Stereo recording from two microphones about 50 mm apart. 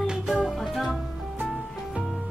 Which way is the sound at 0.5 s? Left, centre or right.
Centre.